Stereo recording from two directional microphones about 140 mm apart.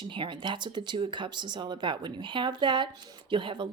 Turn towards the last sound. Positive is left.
turn(degrees=-35)  # may be behind; listen again after turning